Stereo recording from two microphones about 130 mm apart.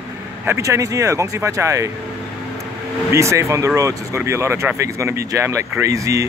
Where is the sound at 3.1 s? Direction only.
25° right (ahead or behind).